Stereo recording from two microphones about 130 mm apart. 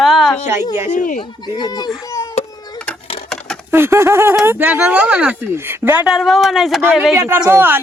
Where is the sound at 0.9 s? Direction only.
85° left.